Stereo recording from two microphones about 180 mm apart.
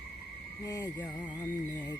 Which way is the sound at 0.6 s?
20° left (ahead or behind).